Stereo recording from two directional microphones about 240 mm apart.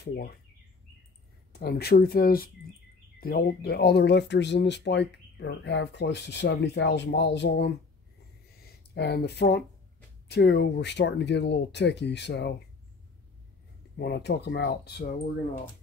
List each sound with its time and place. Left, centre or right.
0.0 s speech: left
1.5 s speech: left
8.5 s a sound: left
10.2 s speech: left
13.9 s speech: left